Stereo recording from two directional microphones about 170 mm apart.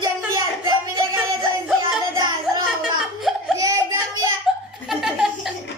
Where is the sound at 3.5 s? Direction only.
20° right (ahead or behind).